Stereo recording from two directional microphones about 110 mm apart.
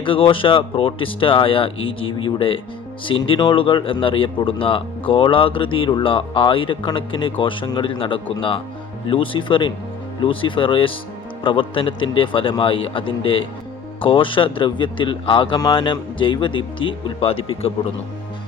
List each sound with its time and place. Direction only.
0.0 s a man's voice: 50° left (ahead or behind)